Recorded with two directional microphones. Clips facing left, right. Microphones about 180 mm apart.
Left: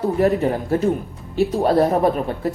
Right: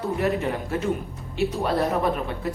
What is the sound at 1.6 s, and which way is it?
Speech, 35° left (ahead or behind).